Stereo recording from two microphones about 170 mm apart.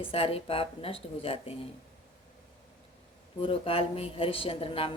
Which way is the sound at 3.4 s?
35° left (ahead or behind).